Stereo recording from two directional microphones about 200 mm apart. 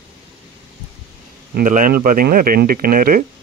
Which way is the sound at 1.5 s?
45° right (ahead or behind).